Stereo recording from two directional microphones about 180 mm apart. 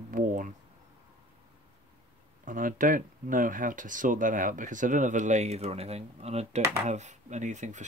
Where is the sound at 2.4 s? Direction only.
50° right (ahead or behind).